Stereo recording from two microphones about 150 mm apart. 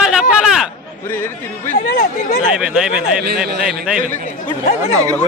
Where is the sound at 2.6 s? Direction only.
5° right (ahead or behind).